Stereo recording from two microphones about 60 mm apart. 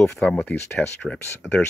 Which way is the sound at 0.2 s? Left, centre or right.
Left.